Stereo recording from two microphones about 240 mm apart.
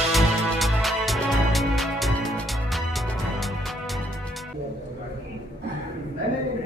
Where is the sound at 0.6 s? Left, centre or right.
Centre.